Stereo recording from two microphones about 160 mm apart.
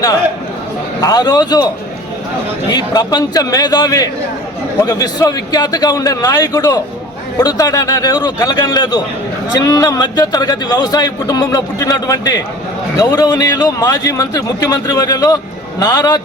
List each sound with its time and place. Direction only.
1.0 s a man's voice: 25° left (ahead or behind)